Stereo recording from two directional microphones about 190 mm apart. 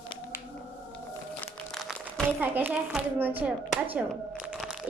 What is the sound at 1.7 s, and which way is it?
Music, centre (ahead or behind).